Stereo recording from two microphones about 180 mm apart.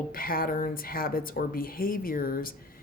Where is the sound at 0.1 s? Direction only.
55° left (ahead or behind).